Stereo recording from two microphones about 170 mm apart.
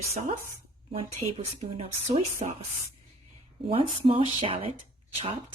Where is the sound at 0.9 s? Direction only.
35° right (ahead or behind).